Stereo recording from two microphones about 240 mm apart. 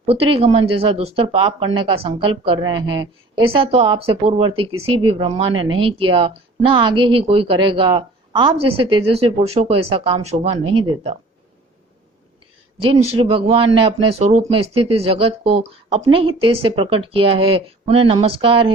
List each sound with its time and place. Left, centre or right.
0.0 s speech: right
12.9 s speech: right